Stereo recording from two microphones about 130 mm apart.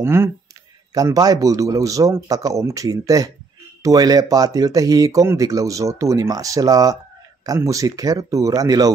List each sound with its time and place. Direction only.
0.0 s speech: 20° right (ahead or behind)
0.9 s speech: 30° right (ahead or behind)